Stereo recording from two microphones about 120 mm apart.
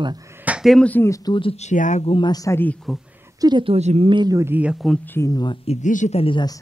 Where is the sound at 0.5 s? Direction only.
5° right (ahead or behind).